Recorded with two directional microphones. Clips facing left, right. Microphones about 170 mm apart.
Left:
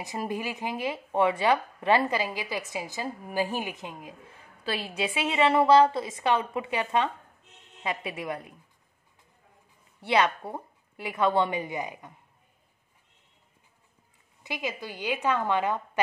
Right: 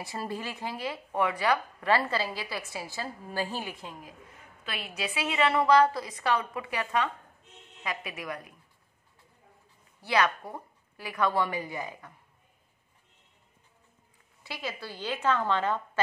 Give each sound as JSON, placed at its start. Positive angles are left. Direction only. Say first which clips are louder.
{"t": 0.0, "sound": "speech", "louder": "left 3 dB", "side_deg": 15}
{"t": 4.6, "sound": "a woman's voice", "louder": "left 6 dB", "side_deg": 30}
{"t": 10.0, "sound": "a woman's voice", "louder": "left 2 dB", "side_deg": 25}
{"t": 14.4, "sound": "speech", "louder": "left 4 dB", "side_deg": 20}